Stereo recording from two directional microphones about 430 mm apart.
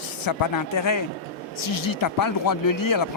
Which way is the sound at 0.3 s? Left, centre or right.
Left.